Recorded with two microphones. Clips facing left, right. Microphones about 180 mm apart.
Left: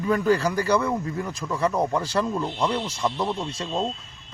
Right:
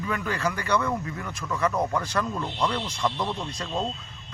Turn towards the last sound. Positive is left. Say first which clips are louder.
# left 3 dB
turn(degrees=25)  # may be behind; listen again after turning